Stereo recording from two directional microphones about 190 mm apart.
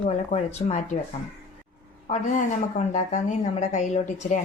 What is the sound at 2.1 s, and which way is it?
Speech, 35° left (ahead or behind).